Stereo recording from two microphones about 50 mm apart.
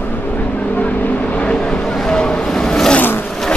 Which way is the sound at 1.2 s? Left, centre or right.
Left.